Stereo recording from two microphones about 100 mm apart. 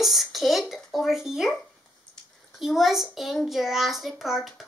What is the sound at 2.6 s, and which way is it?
A child's voice, 5° right (ahead or behind).